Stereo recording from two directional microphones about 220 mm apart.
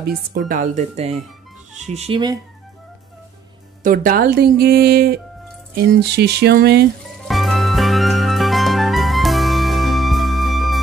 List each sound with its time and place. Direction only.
0.0 s speech: 40° right (ahead or behind); by 2.3 s 25° right (ahead or behind)
3.8 s speech: 40° right (ahead or behind)
7.2 s music: centre (ahead or behind)